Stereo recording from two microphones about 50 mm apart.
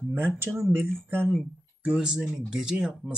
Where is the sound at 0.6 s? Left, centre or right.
Right.